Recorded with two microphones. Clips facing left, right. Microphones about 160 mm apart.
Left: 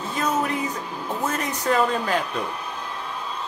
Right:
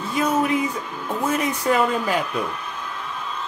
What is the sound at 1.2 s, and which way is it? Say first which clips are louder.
Speech: right 4 dB; 10° right (ahead or behind).